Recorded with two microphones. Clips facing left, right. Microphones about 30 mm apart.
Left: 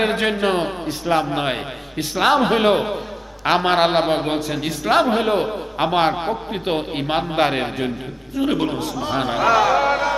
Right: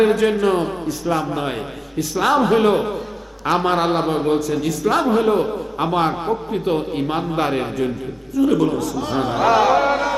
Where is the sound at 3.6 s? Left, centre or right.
Left.